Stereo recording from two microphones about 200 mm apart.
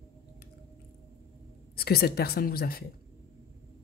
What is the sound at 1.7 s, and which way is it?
Speech, 50° left (ahead or behind).